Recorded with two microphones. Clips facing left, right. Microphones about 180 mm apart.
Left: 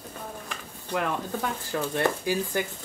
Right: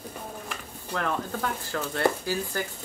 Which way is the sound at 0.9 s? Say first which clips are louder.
Left 1 dB; 15° left (ahead or behind).